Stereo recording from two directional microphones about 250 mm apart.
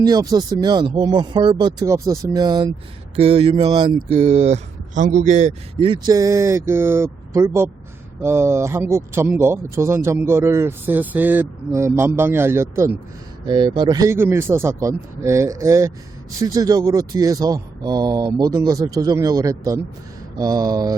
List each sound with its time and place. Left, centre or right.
0.0 s speech: centre
6.1 s speech: centre